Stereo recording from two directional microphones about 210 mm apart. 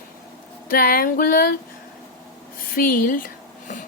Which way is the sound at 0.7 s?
40° left (ahead or behind).